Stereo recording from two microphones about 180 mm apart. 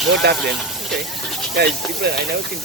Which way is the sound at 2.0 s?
65° right (ahead or behind).